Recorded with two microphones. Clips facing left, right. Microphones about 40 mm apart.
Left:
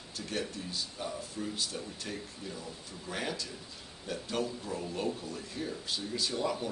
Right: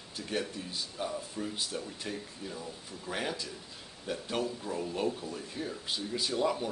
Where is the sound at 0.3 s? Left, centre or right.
Centre.